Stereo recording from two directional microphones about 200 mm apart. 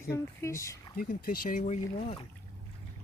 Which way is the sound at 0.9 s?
45° left (ahead or behind).